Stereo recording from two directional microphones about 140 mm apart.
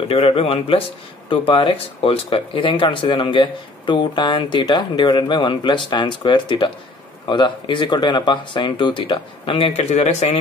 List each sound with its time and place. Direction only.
0.1 s speech: 45° left (ahead or behind)